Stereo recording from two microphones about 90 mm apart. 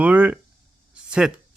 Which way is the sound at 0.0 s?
15° right (ahead or behind).